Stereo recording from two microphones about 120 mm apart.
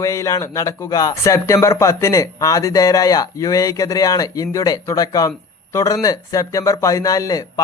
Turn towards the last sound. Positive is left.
turn(degrees=30)  # may be behind; listen again after turning